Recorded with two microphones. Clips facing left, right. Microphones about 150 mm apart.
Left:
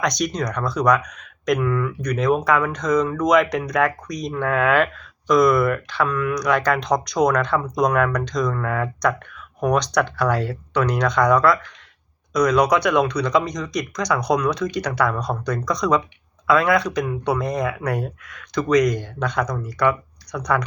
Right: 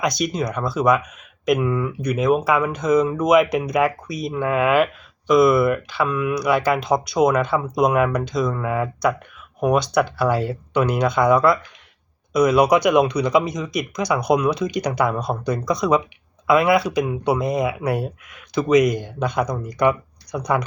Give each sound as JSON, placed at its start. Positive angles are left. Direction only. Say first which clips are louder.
{"t": 0.0, "sound": "speech", "louder": "right 1 dB", "side_deg": -5}
{"t": 1.5, "sound": "speech", "louder": "left 2 dB", "side_deg": -20}
{"t": 2.0, "sound": "speech", "louder": "right 3 dB", "side_deg": -5}